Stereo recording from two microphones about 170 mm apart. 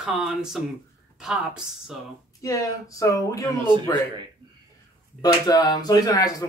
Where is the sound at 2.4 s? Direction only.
20° left (ahead or behind).